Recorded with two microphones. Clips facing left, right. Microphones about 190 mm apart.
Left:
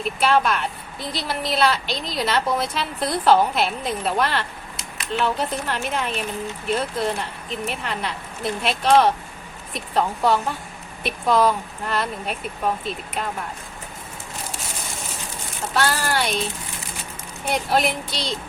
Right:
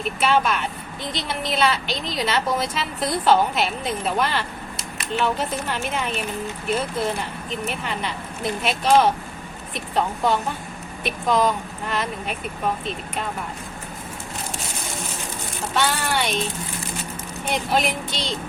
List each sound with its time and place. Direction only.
0.0 s a woman's voice: centre (ahead or behind)
15.7 s a woman's voice: centre (ahead or behind)
17.4 s a woman's voice: centre (ahead or behind)